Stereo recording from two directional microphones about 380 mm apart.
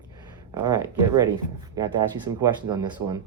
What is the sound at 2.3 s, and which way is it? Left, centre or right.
Speech, centre.